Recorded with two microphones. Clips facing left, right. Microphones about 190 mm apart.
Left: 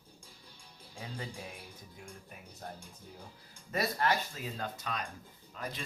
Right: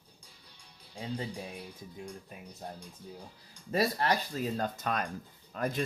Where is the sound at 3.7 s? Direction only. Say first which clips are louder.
Right 3 dB; 30° right (ahead or behind); by 5.8 s 50° right (ahead or behind).